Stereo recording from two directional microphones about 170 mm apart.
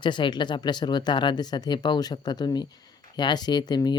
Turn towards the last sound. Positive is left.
turn(degrees=25)  # may be behind; listen again after turning